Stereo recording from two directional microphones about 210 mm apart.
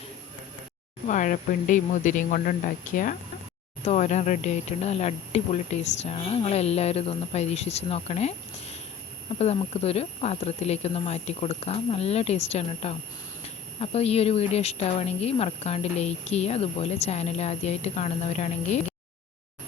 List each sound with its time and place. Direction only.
1.0 s speech: 35° left (ahead or behind)